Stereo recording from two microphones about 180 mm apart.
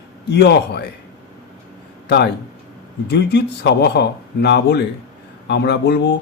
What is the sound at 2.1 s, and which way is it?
Speech, 70° left (ahead or behind).